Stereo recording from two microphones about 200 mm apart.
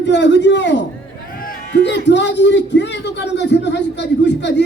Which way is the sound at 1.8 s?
60° left (ahead or behind).